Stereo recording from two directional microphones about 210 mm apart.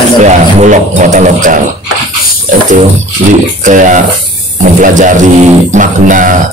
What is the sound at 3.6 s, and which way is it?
Speech, 35° right (ahead or behind).